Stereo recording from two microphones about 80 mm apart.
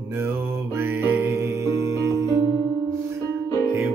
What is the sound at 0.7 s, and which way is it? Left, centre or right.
Music, right.